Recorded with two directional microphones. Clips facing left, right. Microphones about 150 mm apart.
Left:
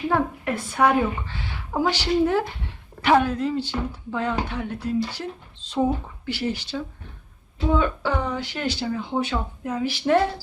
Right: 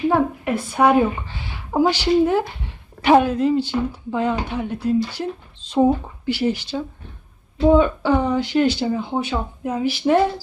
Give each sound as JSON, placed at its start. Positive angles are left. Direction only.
{"t": 0.1, "sound": "speech", "side_deg": -10}